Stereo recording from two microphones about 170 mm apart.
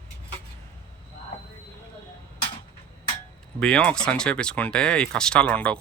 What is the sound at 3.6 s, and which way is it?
Speech, 5° left (ahead or behind).